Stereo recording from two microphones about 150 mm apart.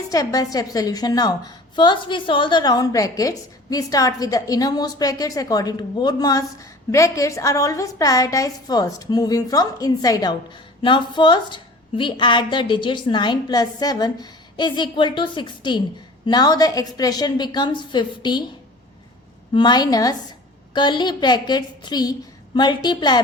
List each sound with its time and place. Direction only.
0.1 s a woman's voice: 25° left (ahead or behind)
19.5 s a woman's voice: 30° left (ahead or behind)